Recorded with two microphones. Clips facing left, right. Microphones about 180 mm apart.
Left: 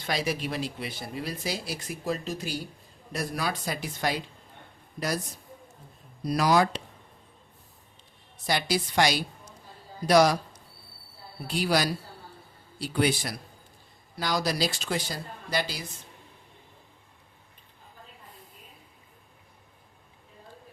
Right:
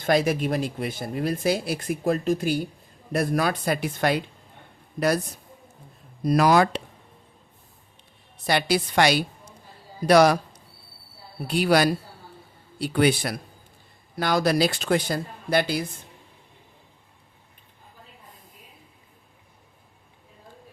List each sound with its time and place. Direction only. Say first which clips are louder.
0.0 s speech: right 8 dB; 50° right (ahead or behind)
6.2 s speech: right 5 dB; 60° right (ahead or behind)
8.4 s speech: right 5 dB; 60° right (ahead or behind)
11.4 s speech: right 6 dB; 60° right (ahead or behind)